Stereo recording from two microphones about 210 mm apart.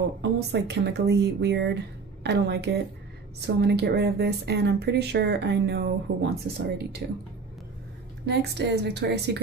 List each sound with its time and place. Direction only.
0.2 s a woman's voice: 55° right (ahead or behind)
8.3 s a woman's voice: 50° right (ahead or behind)